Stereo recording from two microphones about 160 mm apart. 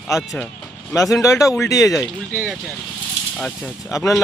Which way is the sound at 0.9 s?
20° left (ahead or behind).